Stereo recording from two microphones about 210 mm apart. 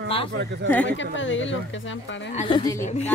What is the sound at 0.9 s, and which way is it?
Speech, 65° left (ahead or behind).